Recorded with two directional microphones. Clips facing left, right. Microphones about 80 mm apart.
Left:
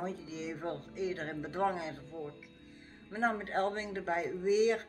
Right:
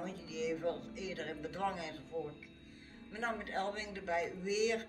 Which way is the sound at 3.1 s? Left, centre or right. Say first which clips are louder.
Left 6 dB; left.